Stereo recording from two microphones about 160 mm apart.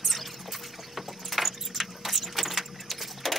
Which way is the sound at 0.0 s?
Centre (ahead or behind).